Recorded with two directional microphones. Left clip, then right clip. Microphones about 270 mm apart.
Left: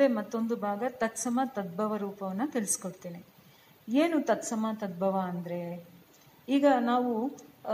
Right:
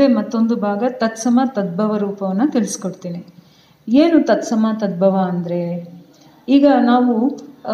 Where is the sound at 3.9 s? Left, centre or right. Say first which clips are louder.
Right 14 dB; left.